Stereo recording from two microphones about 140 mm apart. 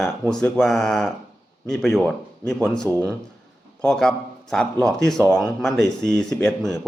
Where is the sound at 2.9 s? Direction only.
20° left (ahead or behind).